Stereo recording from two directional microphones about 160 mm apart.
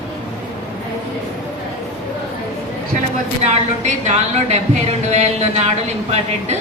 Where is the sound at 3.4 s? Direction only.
45° right (ahead or behind).